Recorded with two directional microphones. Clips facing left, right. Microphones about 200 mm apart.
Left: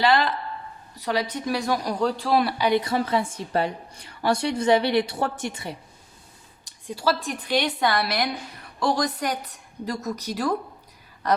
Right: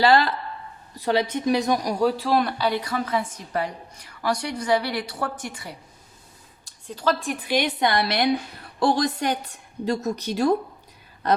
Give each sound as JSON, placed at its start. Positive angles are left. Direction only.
{"t": 0.0, "sound": "speech", "side_deg": -40}
{"t": 0.9, "sound": "speech", "side_deg": -30}
{"t": 2.8, "sound": "a woman's voice", "side_deg": 30}
{"t": 6.7, "sound": "speech", "side_deg": 15}